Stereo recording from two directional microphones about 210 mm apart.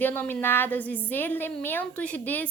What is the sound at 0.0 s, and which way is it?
Speech, 10° left (ahead or behind).